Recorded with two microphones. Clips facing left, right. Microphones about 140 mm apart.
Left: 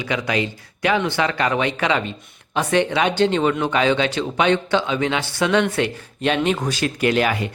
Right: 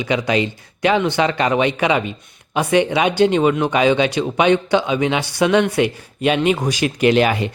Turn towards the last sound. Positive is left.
turn(degrees=-20)  # may be behind; listen again after turning